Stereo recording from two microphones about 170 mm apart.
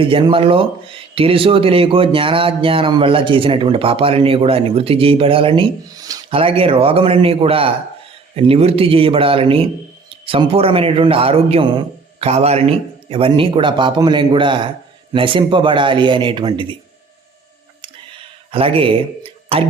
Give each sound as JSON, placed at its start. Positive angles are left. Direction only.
{"t": 0.0, "sound": "speech", "side_deg": -30}
{"t": 6.3, "sound": "a man's voice", "side_deg": -35}
{"t": 18.5, "sound": "a man's voice", "side_deg": -30}